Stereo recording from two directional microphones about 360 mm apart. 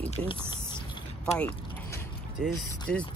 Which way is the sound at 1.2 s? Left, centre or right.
Centre.